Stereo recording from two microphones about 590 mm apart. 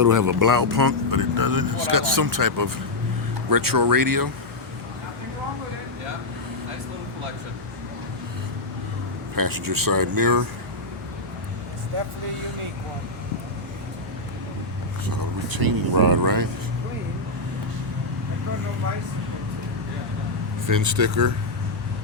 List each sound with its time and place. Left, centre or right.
0.0 s speech: right
9.3 s speech: right
15.0 s speech: right
20.7 s speech: right